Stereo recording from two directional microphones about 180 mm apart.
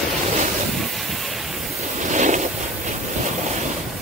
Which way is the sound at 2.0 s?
45° right (ahead or behind).